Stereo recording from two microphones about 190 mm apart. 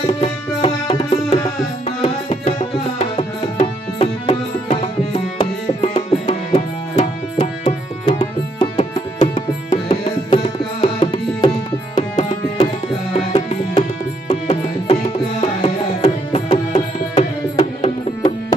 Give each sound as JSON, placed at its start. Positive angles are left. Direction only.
{"t": 0.0, "sound": "music", "side_deg": 30}
{"t": 1.1, "sound": "tabla", "side_deg": 35}
{"t": 13.1, "sound": "music", "side_deg": 35}